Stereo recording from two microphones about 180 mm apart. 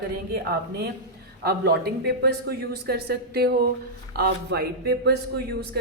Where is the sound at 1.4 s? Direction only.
60° right (ahead or behind).